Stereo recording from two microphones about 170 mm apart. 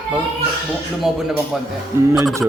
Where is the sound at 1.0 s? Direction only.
Centre (ahead or behind).